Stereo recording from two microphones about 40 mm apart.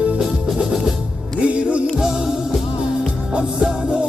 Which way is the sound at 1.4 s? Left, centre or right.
Right.